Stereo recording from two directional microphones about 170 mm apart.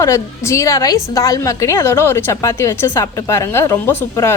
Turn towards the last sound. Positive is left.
turn(degrees=15)  # may be behind; listen again after turning